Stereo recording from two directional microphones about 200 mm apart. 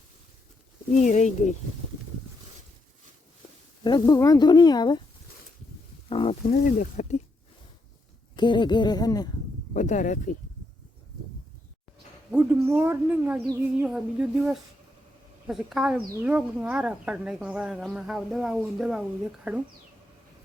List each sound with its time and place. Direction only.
0.9 s speech: 40° left (ahead or behind)
3.8 s speech: 20° left (ahead or behind)
6.1 s wild animals: 25° left (ahead or behind)
6.5 s speech: 40° left (ahead or behind)
8.4 s speech: 20° left (ahead or behind)
9.7 s speech: 40° left (ahead or behind)
12.3 s speech: 10° right (ahead or behind)